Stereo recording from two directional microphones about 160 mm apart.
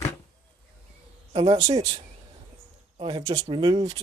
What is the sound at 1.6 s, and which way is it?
Speech, 25° right (ahead or behind).